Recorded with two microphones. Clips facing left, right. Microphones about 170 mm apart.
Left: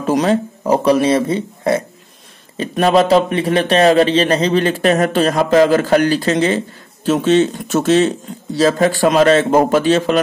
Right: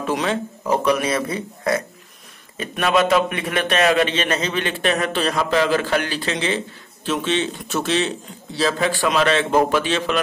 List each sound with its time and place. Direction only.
0.0 s a man's voice: 40° left (ahead or behind)